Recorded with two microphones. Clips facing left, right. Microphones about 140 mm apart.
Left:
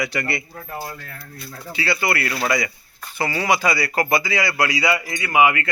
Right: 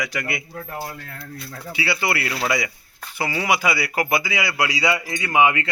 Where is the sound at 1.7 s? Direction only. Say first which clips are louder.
Left 1 dB; 10° right (ahead or behind).